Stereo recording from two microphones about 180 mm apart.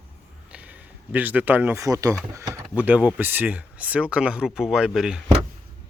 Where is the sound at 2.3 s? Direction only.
15° right (ahead or behind).